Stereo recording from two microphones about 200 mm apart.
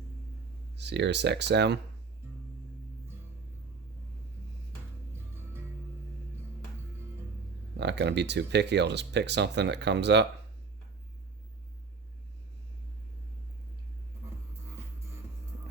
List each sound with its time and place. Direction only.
0.8 s speech: 60° right (ahead or behind)
7.8 s speech: 60° right (ahead or behind)